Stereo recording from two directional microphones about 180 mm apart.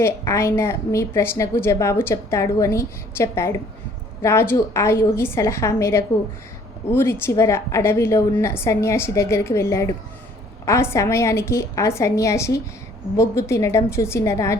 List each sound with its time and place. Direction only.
0.0 s a woman's voice: 15° left (ahead or behind)